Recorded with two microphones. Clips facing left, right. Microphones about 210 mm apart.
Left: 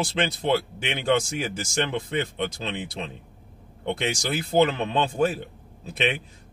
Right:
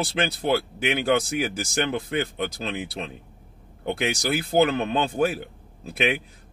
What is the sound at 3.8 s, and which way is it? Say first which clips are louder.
Speech: right 1 dB; 10° right (ahead or behind).